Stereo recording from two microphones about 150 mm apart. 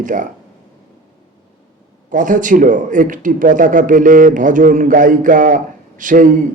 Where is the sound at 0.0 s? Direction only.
60° right (ahead or behind).